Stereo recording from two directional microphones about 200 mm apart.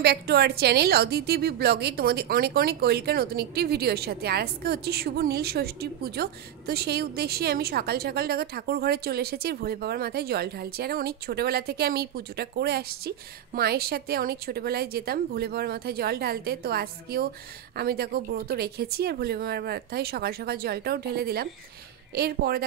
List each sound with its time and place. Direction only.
0.0 s a woman's voice: 55° right (ahead or behind)